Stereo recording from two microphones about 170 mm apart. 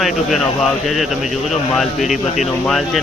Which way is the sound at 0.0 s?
Centre (ahead or behind).